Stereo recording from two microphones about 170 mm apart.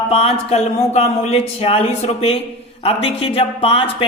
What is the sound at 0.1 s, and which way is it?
Speech, 35° left (ahead or behind).